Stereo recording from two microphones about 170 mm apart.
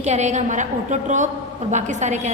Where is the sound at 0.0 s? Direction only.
45° right (ahead or behind).